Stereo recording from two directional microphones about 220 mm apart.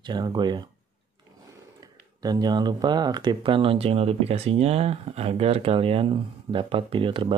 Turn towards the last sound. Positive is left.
turn(degrees=-25)  # may be behind; listen again after turning